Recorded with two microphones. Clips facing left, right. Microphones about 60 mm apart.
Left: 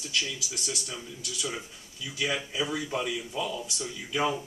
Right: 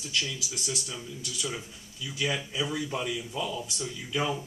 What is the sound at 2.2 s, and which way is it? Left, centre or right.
Speech, centre.